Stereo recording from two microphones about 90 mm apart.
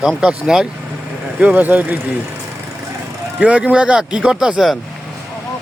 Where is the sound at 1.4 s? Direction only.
15° right (ahead or behind).